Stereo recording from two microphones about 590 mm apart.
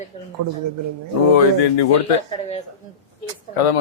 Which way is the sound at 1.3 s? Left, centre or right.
Left.